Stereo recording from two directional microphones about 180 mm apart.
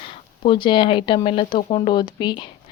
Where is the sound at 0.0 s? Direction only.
25° left (ahead or behind).